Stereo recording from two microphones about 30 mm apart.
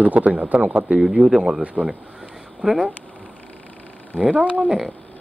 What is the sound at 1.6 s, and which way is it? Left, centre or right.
Speech, right.